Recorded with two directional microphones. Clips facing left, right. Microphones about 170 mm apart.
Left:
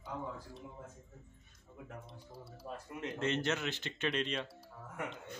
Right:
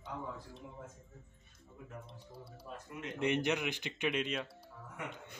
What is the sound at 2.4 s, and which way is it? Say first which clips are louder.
Speech: left 3 dB; 30° left (ahead or behind).